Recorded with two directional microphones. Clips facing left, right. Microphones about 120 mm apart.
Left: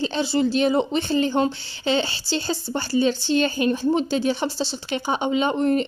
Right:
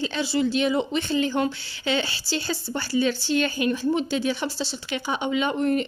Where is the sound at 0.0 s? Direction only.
30° left (ahead or behind).